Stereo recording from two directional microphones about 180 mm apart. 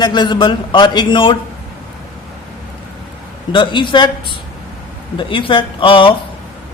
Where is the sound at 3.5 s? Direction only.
25° left (ahead or behind).